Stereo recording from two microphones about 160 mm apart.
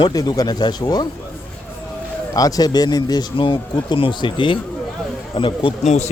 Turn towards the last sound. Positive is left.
turn(degrees=45)  # may be behind; listen again after turning